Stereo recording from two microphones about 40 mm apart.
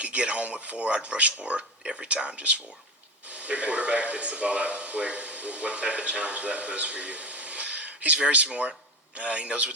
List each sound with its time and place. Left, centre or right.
0.0 s speech: right
1.5 s speech: centre
2.0 s speech: right